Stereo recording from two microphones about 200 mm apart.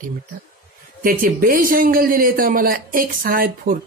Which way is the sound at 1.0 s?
45° right (ahead or behind).